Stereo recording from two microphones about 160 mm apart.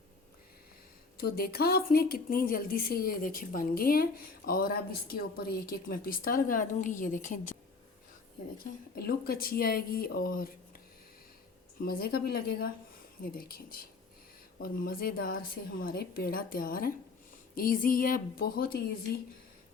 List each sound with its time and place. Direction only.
1.1 s a woman's voice: 70° left (ahead or behind); by 7.5 s 55° left (ahead or behind)
9.0 s speech: 70° left (ahead or behind)
11.8 s a woman's voice: 70° left (ahead or behind)